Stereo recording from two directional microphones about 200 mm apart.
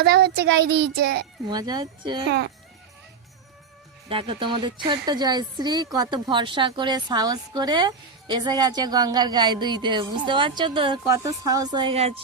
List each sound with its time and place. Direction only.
0.0 s a child's voice: 55° right (ahead or behind)
1.5 s speech: 20° right (ahead or behind)
4.1 s speech: 25° right (ahead or behind)